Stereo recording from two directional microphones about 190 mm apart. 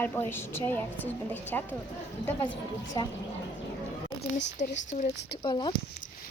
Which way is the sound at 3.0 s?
20° left (ahead or behind).